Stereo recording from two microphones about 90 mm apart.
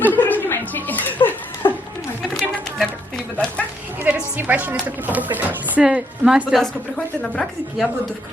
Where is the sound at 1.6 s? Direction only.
60° left (ahead or behind).